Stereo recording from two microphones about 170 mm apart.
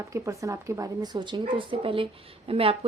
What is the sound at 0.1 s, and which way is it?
A woman's voice, 20° right (ahead or behind).